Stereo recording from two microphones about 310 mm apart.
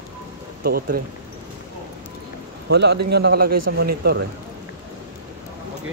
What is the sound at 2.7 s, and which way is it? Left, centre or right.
A man's voice, right.